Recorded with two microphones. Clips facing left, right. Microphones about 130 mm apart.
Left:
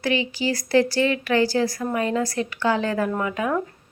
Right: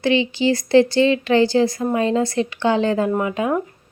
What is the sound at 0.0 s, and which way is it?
Speech, 25° right (ahead or behind).